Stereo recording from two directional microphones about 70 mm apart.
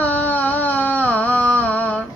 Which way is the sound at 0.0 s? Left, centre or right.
Left.